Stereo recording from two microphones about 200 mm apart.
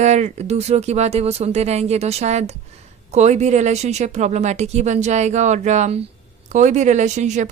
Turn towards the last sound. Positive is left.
turn(degrees=-35)  # may be behind; listen again after turning